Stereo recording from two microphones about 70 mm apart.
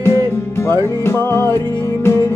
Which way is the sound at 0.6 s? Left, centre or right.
Left.